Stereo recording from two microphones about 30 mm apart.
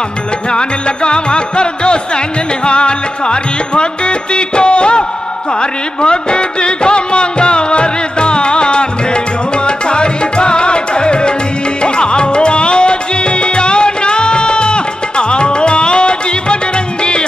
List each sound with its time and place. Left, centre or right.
0.5 s music: left